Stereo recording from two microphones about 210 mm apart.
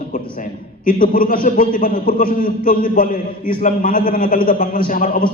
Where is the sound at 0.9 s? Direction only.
40° left (ahead or behind).